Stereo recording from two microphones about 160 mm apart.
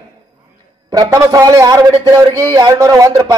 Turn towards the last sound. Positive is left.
turn(degrees=-20)  # may be behind; listen again after turning